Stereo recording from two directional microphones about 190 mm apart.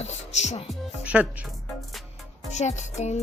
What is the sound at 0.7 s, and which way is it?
Speech, 5° right (ahead or behind).